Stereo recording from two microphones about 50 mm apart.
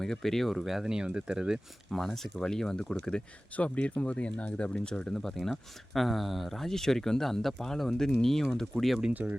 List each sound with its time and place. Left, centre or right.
0.0 s speech: centre
0.5 s speech: centre
1.9 s speech: centre
3.5 s speech: left
5.2 s speech: centre
9.2 s speech: right